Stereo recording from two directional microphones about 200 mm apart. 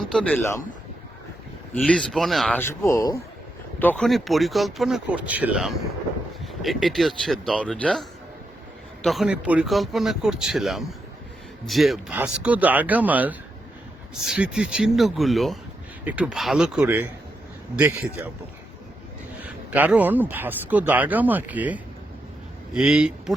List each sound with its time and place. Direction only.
0.1 s speech: 5° left (ahead or behind)
1.7 s speech: 5° left (ahead or behind)
3.8 s speech: 5° left (ahead or behind)
9.0 s speech: 5° right (ahead or behind)
19.4 s speech: 10° right (ahead or behind)